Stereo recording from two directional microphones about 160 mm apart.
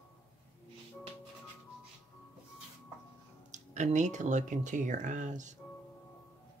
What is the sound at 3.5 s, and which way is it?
Speech, 45° right (ahead or behind).